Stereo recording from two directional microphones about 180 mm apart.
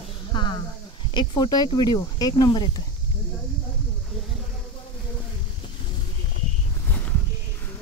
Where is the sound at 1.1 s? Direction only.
25° left (ahead or behind).